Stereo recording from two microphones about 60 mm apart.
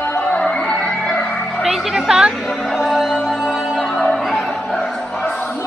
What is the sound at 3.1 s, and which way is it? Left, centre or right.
Music, centre.